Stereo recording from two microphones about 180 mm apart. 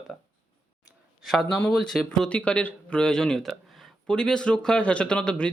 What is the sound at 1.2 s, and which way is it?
Speech, centre (ahead or behind).